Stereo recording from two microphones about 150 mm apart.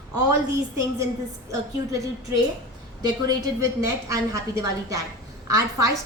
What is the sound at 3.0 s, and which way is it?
A woman's voice, 25° right (ahead or behind).